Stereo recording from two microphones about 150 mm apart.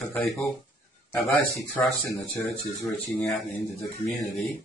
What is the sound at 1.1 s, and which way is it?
Speech, centre (ahead or behind).